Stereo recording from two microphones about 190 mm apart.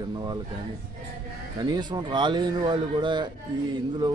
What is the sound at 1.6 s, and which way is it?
Speech, 20° right (ahead or behind).